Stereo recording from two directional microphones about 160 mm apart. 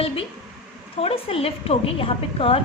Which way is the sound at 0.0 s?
35° left (ahead or behind).